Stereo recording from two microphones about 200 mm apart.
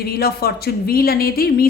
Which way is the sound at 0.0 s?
50° left (ahead or behind).